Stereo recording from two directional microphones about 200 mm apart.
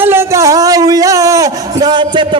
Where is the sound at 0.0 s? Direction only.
10° right (ahead or behind).